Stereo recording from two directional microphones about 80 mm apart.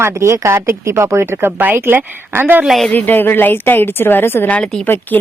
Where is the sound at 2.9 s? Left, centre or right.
Left.